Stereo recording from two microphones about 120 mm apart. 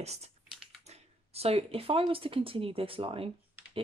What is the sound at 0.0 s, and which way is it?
Speech, 65° right (ahead or behind).